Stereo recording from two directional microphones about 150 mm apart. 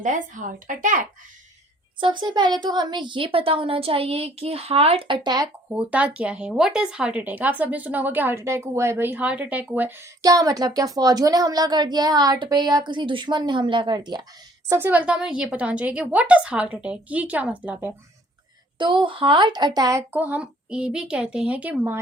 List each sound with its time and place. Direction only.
0.0 s speech: 60° right (ahead or behind)
2.0 s a woman's voice: 30° right (ahead or behind)
5.7 s speech: 10° right (ahead or behind)
10.2 s speech: 25° right (ahead or behind)
14.7 s speech: 15° right (ahead or behind)
18.8 s a woman's voice: 35° right (ahead or behind)
20.1 s speech: 10° right (ahead or behind)